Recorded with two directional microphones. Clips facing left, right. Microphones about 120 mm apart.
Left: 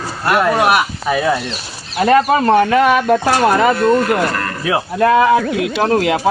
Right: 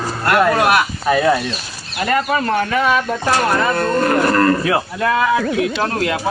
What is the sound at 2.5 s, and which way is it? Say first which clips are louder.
Speech: left 5 dB; 50° left (ahead or behind).